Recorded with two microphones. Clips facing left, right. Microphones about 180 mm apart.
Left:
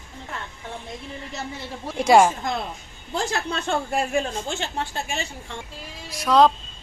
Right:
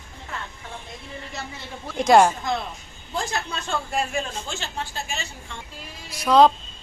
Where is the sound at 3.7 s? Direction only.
60° left (ahead or behind).